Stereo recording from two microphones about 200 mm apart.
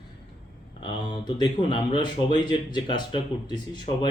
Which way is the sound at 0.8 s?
25° left (ahead or behind).